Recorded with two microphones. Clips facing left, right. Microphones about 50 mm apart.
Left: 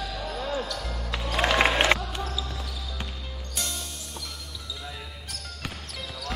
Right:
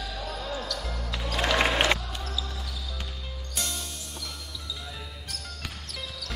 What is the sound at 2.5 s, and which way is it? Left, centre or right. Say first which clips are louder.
Basketball bounce: left 2 dB; centre.